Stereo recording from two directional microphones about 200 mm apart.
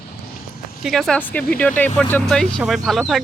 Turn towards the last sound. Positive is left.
turn(degrees=0)  # may be behind; listen again after turning